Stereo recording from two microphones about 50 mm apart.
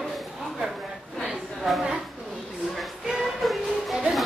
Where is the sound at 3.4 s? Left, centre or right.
Centre.